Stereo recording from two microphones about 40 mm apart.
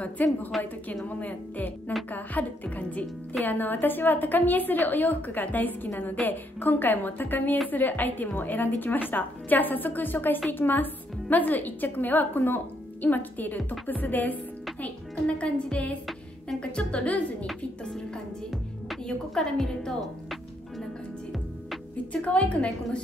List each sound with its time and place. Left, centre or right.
0.0 s a woman's voice: left
3.4 s a woman's voice: left
15.2 s speech: left
17.0 s a woman's voice: left
19.0 s a woman's voice: centre
22.1 s a woman's voice: left